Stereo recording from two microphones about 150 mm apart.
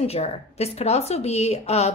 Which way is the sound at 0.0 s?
45° left (ahead or behind).